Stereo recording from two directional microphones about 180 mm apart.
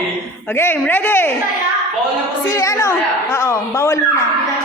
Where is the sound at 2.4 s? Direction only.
15° left (ahead or behind).